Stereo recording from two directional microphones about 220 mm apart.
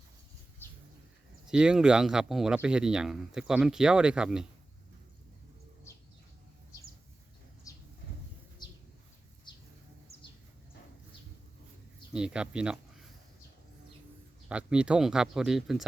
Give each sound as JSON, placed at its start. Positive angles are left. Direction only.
{"t": 1.5, "sound": "speech", "side_deg": -5}
{"t": 7.7, "sound": "a sound", "side_deg": 15}
{"t": 8.6, "sound": "bird", "side_deg": 20}
{"t": 12.1, "sound": "speech", "side_deg": -5}
{"t": 14.4, "sound": "speech", "side_deg": -5}